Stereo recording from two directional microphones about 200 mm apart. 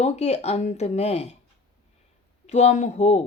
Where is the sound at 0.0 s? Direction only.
35° left (ahead or behind).